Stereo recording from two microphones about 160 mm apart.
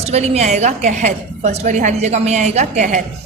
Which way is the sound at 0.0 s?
45° right (ahead or behind).